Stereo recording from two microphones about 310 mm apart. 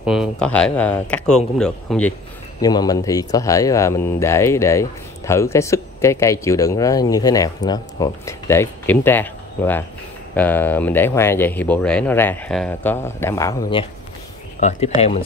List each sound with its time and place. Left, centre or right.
0.0 s speech: centre; by 14.9 s left